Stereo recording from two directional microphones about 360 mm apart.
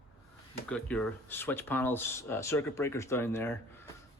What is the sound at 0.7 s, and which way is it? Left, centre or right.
Speech, centre.